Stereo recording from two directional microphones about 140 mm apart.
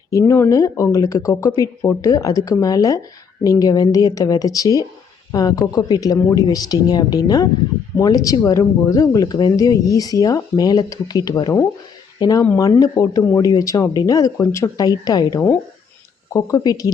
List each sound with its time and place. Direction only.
0.1 s speech: 20° left (ahead or behind)